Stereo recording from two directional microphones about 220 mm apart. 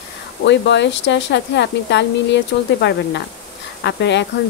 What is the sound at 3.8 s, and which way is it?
Speech, 50° left (ahead or behind).